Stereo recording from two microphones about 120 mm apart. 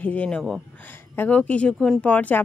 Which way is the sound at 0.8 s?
15° left (ahead or behind).